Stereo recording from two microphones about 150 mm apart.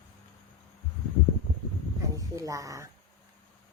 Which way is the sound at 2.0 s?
20° right (ahead or behind).